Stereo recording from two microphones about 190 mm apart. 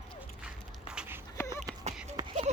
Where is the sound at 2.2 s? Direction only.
20° right (ahead or behind).